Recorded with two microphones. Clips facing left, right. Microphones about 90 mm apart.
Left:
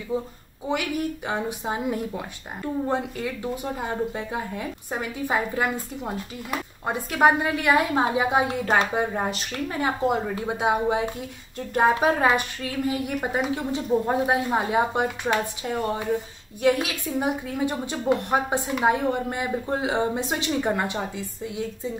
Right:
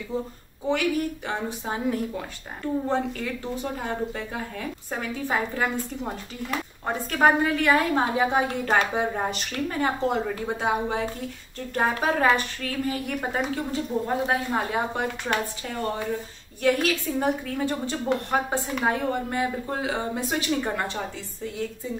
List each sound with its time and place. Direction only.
0.7 s speech: 15° left (ahead or behind)
16.6 s speech: 15° left (ahead or behind)